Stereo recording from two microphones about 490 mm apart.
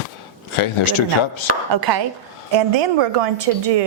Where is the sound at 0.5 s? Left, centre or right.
Left.